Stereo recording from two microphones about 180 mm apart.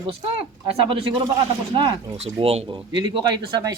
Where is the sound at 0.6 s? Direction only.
30° right (ahead or behind).